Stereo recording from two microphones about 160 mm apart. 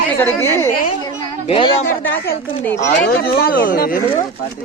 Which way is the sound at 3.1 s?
70° left (ahead or behind).